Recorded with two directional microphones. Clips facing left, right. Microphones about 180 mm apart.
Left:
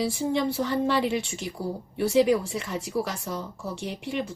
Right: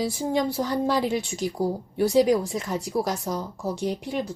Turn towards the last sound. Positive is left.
turn(degrees=-40)  # may be behind; listen again after turning